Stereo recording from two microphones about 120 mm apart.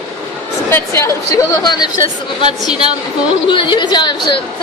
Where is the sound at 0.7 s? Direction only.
25° left (ahead or behind).